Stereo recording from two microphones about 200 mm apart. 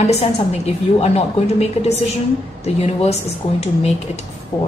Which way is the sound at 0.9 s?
30° left (ahead or behind).